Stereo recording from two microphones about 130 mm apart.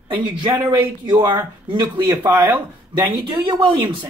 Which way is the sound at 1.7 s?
35° right (ahead or behind).